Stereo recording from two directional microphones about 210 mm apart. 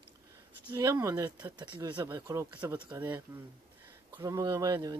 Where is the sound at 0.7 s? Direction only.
15° right (ahead or behind).